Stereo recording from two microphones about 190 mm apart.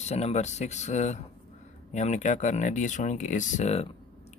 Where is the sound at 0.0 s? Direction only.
35° left (ahead or behind).